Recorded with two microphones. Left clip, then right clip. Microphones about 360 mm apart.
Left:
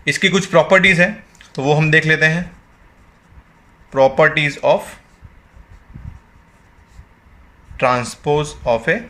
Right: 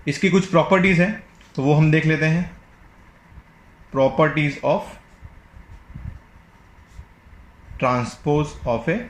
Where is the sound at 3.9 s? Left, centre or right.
Left.